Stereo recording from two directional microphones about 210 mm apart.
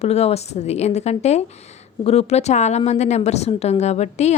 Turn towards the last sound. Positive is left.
turn(degrees=30)  # may be behind; listen again after turning